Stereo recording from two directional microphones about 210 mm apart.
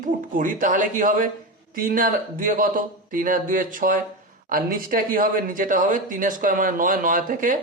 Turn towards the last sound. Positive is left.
turn(degrees=-40)  # may be behind; listen again after turning